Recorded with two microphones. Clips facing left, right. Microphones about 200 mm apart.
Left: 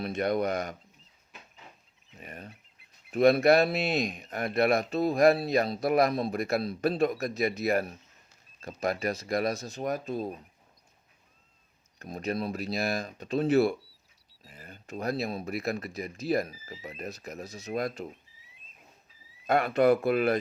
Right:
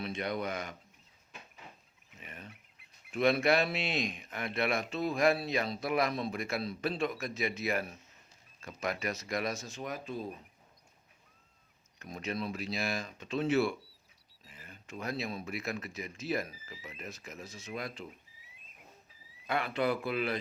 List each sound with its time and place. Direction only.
0.0 s speech: 45° left (ahead or behind)
2.0 s speech: 40° left (ahead or behind)
11.9 s speech: 35° left (ahead or behind)
19.5 s speech: 45° left (ahead or behind)